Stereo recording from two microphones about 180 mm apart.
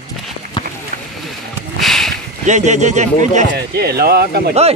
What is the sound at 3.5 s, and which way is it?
Speech, 60° right (ahead or behind).